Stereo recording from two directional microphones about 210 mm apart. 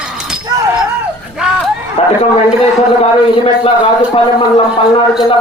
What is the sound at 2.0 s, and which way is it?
Chatter, 30° left (ahead or behind).